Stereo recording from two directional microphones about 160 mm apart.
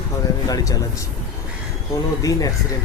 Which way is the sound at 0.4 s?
25° left (ahead or behind).